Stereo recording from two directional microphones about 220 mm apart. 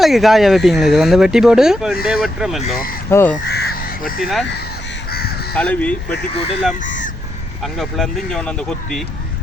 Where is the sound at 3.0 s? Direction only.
10° left (ahead or behind).